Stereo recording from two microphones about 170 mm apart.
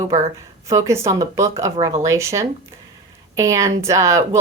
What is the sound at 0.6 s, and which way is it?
Speech, 15° right (ahead or behind).